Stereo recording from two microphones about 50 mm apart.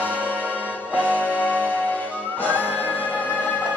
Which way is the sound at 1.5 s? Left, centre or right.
Left.